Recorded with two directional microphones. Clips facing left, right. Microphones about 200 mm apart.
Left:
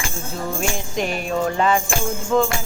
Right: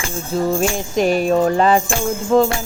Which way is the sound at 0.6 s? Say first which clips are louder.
Right 6 dB; 40° right (ahead or behind).